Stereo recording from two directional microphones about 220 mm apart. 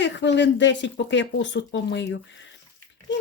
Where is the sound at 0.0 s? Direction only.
55° left (ahead or behind).